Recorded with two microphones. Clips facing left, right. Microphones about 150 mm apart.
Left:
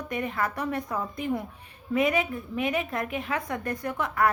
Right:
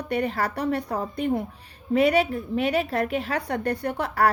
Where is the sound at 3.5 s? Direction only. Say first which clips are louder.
Right 5 dB; 35° right (ahead or behind).